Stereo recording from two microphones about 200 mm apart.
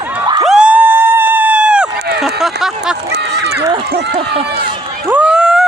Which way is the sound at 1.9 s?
55° right (ahead or behind).